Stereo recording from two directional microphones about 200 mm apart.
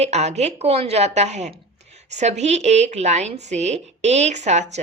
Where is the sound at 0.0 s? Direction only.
35° right (ahead or behind).